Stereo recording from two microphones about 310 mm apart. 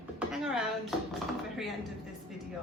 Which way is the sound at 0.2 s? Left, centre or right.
Centre.